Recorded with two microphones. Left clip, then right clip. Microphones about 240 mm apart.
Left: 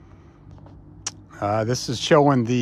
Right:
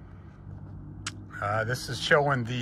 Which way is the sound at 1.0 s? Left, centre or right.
Left.